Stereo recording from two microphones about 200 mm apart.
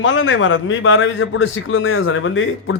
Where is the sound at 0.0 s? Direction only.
75° left (ahead or behind).